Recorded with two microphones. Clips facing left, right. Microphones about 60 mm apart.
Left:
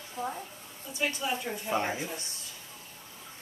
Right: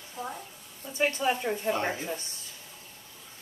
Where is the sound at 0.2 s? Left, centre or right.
Left.